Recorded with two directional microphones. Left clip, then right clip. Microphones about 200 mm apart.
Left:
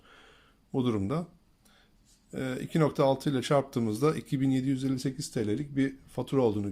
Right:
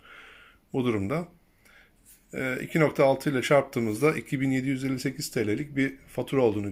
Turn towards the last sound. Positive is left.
turn(degrees=0)  # may be behind; listen again after turning